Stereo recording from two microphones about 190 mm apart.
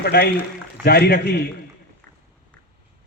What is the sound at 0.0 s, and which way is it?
A man's voice, 55° left (ahead or behind).